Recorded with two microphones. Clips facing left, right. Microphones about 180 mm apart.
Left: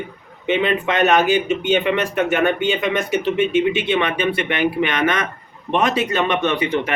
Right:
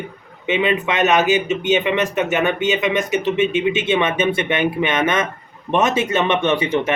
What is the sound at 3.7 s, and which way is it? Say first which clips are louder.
Speech: right 1 dB; 20° right (ahead or behind).